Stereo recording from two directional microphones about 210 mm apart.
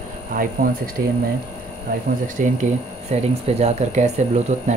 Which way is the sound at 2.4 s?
35° right (ahead or behind).